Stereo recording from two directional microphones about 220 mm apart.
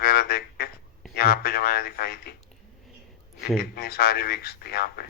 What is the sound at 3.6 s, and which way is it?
A man's voice, 45° left (ahead or behind).